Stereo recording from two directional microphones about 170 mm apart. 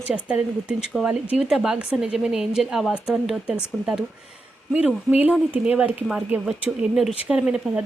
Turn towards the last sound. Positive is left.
turn(degrees=-5)  # may be behind; listen again after turning